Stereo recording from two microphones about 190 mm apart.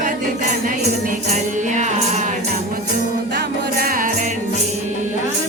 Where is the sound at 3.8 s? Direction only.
45° right (ahead or behind).